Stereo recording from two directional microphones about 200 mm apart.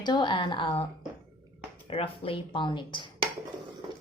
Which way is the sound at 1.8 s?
30° left (ahead or behind).